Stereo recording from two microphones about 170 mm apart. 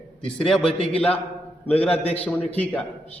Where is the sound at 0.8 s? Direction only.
35° left (ahead or behind).